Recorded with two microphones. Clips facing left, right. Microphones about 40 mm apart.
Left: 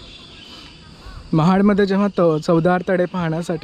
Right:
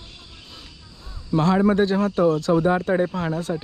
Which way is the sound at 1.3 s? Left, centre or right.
Left.